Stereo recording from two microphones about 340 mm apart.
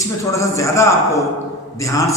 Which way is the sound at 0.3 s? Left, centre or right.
Centre.